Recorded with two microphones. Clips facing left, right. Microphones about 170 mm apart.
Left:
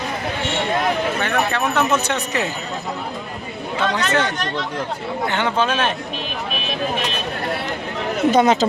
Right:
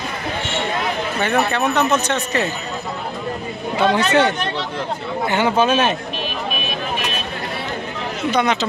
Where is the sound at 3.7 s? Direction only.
10° right (ahead or behind).